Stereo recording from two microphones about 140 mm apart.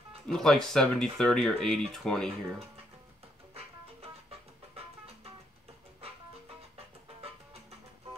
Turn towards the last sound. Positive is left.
turn(degrees=-45)  # may be behind; listen again after turning